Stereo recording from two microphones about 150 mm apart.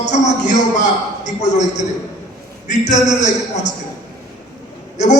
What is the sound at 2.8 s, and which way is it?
Speech, 50° left (ahead or behind).